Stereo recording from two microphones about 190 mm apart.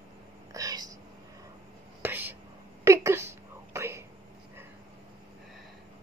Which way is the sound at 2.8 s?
15° right (ahead or behind).